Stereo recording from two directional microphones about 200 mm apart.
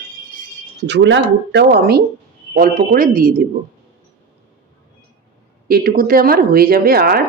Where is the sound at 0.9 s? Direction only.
60° right (ahead or behind); by 3.4 s 45° right (ahead or behind).